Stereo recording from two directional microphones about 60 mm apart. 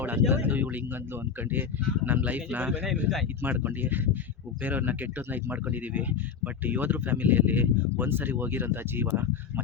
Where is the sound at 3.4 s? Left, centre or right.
Right.